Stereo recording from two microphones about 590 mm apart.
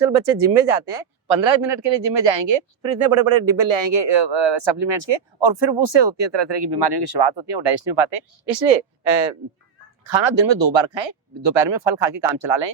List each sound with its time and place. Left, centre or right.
0.0 s speech: right
1.3 s speech: right
8.4 s speech: right
10.0 s speech: right